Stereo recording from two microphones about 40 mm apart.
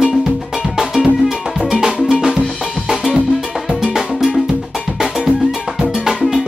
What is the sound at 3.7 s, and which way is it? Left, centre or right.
Music, centre.